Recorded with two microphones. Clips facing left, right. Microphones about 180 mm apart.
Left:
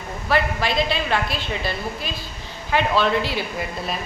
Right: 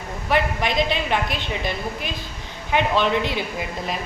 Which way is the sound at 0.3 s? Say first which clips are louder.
Even; 15° right (ahead or behind).